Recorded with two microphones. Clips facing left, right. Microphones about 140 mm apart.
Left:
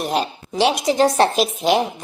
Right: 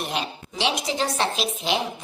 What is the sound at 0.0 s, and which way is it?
Speech, 40° left (ahead or behind).